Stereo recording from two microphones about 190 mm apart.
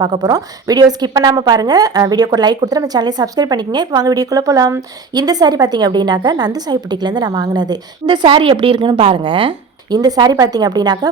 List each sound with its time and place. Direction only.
0.0 s a woman's voice: 20° right (ahead or behind)